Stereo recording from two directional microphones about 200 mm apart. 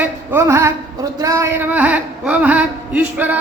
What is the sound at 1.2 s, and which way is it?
Speech, 15° right (ahead or behind).